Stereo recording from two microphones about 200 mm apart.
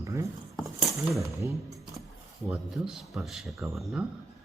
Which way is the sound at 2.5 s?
5° right (ahead or behind).